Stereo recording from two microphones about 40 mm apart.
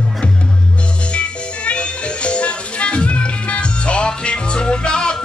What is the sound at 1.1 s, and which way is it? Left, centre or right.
Music, left.